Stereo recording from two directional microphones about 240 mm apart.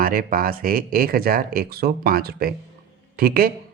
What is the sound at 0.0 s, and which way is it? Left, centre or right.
Speech, right.